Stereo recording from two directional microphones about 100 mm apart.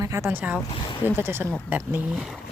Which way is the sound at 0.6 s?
55° left (ahead or behind).